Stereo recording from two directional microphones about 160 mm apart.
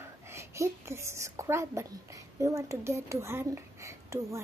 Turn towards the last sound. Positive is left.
turn(degrees=-20)  # may be behind; listen again after turning